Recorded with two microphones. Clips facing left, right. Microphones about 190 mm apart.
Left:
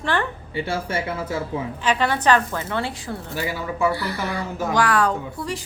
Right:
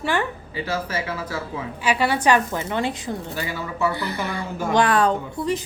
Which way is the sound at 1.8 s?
10° right (ahead or behind).